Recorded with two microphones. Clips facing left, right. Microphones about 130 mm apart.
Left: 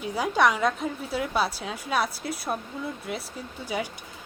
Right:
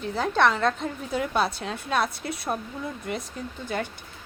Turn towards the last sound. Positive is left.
turn(degrees=5)  # may be behind; listen again after turning